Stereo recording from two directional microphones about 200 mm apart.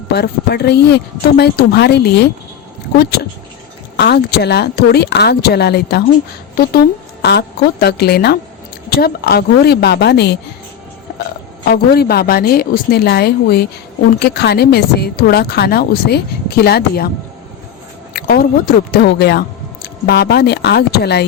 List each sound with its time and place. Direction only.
0.1 s speech: 55° left (ahead or behind)
3.9 s speech: 55° left (ahead or behind)
11.6 s speech: 50° left (ahead or behind)
18.1 s speech: 50° left (ahead or behind)